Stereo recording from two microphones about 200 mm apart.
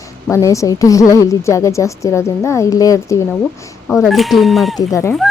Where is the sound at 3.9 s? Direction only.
Centre (ahead or behind).